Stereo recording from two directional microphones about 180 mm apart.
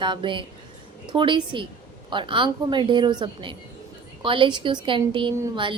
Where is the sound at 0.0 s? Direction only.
25° right (ahead or behind).